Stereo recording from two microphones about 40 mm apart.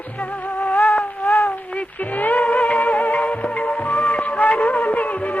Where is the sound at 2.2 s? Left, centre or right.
Left.